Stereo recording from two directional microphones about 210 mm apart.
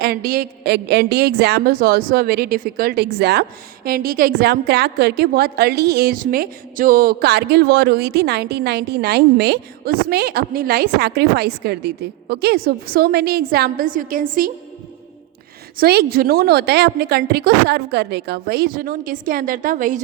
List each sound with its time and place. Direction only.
0.0 s a woman's voice: 45° right (ahead or behind)
15.8 s a woman's voice: 45° right (ahead or behind)